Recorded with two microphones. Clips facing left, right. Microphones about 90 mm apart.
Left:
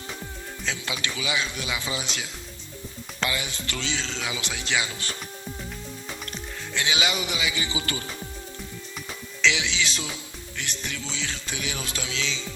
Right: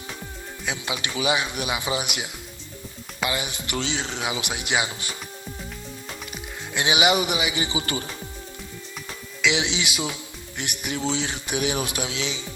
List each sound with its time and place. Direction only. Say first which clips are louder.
0.6 s speech: right 2 dB; 20° right (ahead or behind)
6.7 s speech: right 6 dB; 20° right (ahead or behind)
9.4 s speech: right 1 dB; 20° right (ahead or behind)